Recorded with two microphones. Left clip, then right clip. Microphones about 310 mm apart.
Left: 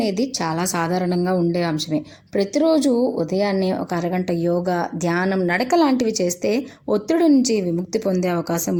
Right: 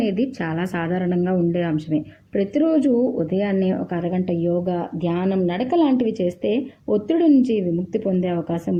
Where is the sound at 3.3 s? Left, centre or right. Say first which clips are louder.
Left 2 dB; right.